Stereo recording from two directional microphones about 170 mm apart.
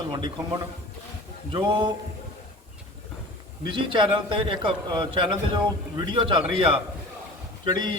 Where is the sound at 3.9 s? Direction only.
30° right (ahead or behind).